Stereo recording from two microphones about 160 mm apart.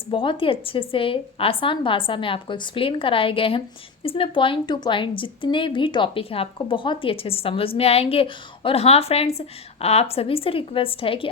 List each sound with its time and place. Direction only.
0.1 s a woman's voice: 35° left (ahead or behind)